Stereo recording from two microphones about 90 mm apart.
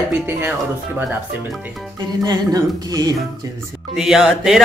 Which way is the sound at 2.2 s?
45° right (ahead or behind).